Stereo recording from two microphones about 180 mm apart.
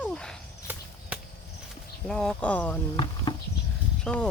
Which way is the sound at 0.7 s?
10° right (ahead or behind).